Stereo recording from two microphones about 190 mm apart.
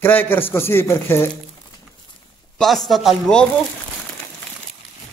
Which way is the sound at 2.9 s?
Centre (ahead or behind).